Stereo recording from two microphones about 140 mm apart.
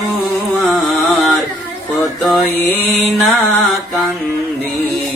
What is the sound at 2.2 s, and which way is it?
Music, centre (ahead or behind).